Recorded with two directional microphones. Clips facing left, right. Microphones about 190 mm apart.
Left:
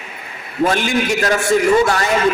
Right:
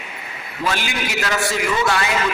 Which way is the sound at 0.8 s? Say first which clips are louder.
Left 8 dB; 45° left (ahead or behind).